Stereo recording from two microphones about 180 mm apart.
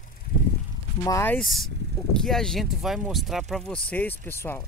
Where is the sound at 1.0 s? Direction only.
15° left (ahead or behind).